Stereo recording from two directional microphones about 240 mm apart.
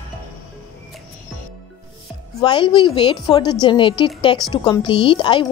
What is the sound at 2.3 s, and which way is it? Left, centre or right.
A woman's voice, centre.